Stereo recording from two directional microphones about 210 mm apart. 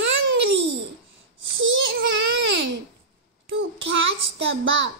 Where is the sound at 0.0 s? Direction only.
60° right (ahead or behind).